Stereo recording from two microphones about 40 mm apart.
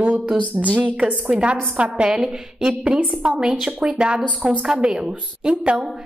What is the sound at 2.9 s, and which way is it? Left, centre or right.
A woman's voice, right.